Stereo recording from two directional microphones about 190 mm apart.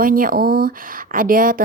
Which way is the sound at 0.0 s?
45° right (ahead or behind).